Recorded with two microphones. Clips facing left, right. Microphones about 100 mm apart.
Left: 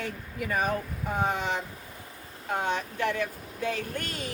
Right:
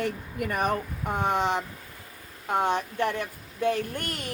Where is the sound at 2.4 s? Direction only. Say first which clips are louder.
Right 4 dB; 55° right (ahead or behind).